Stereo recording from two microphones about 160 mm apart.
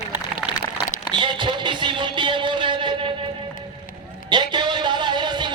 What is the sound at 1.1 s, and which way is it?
Music, 30° right (ahead or behind).